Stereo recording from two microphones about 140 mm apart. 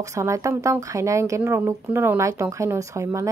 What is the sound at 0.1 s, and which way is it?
Speech, 20° right (ahead or behind).